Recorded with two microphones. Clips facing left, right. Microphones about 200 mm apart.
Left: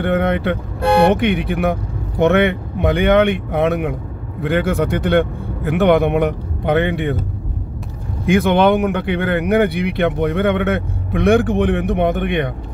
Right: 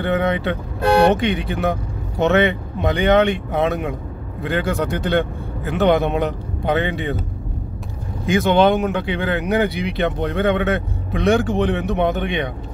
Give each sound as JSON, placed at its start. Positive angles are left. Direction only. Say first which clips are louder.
{"t": 0.0, "sound": "speech", "louder": "left 2 dB", "side_deg": 60}
{"t": 8.3, "sound": "speech", "louder": "left 2 dB", "side_deg": 60}